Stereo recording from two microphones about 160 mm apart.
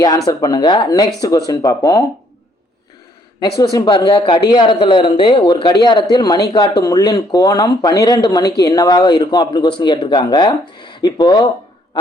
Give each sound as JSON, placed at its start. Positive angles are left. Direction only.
{"t": 0.3, "sound": "speech", "side_deg": 25}
{"t": 3.4, "sound": "speech", "side_deg": 25}